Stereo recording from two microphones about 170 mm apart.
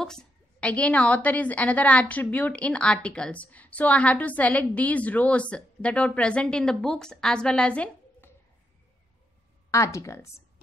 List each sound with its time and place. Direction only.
0.0 s a woman's voice: 5° left (ahead or behind)
9.7 s a woman's voice: 20° left (ahead or behind)